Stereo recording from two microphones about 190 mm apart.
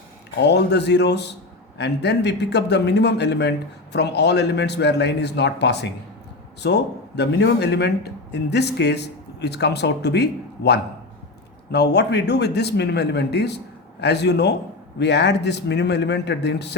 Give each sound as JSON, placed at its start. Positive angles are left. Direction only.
{"t": 0.3, "sound": "a man's voice", "side_deg": 60}